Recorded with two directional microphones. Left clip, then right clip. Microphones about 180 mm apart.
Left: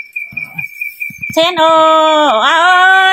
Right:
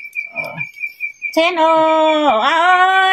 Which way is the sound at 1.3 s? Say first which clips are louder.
Left 4 dB; 25° left (ahead or behind).